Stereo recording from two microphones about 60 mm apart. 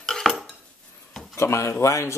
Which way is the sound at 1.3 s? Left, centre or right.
Left.